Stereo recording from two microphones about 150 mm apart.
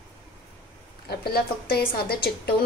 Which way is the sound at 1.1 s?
90° left.